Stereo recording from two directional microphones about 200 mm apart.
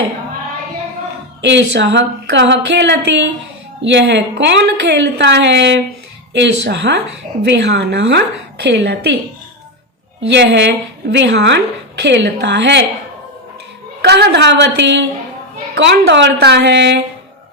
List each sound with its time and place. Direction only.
1.4 s a woman's voice: 60° right (ahead or behind)
10.2 s a woman's voice: 60° right (ahead or behind)
14.0 s a woman's voice: 55° right (ahead or behind)